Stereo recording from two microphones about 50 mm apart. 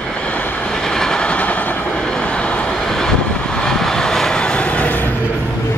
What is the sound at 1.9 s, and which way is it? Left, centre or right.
Vehicle, centre.